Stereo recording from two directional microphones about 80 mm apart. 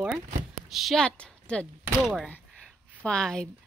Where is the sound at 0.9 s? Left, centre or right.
Centre.